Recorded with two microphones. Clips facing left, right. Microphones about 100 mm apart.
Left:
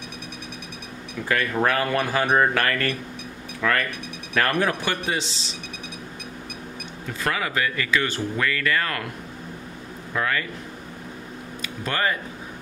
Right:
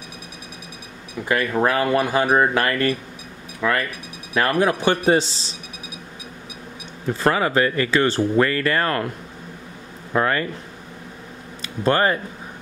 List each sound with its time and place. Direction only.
1.3 s speech: 20° right (ahead or behind)
5.0 s speech: 40° right (ahead or behind)
7.1 s speech: 30° right (ahead or behind)
10.1 s speech: 35° right (ahead or behind)
11.6 s speech: 35° right (ahead or behind)